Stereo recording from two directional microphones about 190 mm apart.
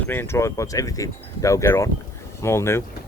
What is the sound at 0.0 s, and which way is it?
Speech, 10° left (ahead or behind).